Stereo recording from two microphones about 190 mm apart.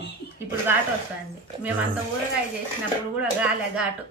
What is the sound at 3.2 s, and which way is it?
Speech, 5° right (ahead or behind).